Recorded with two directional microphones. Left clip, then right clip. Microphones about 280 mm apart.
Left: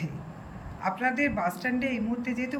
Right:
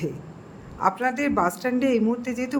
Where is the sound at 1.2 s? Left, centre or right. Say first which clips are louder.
Right 4 dB; centre.